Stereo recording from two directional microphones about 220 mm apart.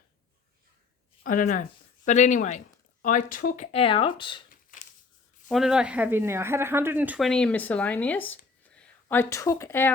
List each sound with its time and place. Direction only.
1.2 s speech: 40° left (ahead or behind); by 4.4 s 20° left (ahead or behind)
5.5 s speech: centre (ahead or behind)